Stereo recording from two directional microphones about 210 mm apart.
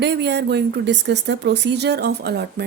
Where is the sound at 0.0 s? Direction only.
55° right (ahead or behind).